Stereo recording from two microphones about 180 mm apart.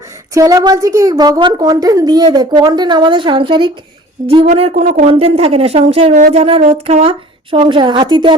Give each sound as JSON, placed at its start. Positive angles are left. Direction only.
{"t": 0.3, "sound": "a woman's voice", "side_deg": -20}
{"t": 4.4, "sound": "a woman's voice", "side_deg": -40}